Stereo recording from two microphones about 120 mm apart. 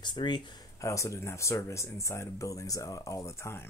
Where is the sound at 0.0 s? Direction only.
40° left (ahead or behind).